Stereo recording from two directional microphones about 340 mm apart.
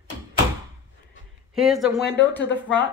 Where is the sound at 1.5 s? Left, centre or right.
Centre.